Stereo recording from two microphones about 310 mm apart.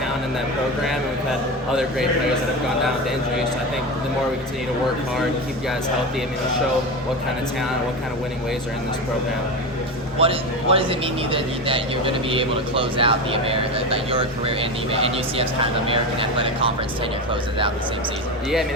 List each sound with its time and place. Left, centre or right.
10.2 s speech: centre